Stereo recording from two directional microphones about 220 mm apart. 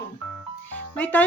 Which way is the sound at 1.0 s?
10° left (ahead or behind).